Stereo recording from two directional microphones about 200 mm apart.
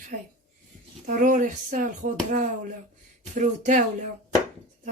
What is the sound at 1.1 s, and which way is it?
Speech, 40° right (ahead or behind).